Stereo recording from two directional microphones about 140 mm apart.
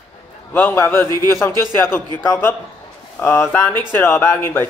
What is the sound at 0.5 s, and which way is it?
Speech, 15° left (ahead or behind).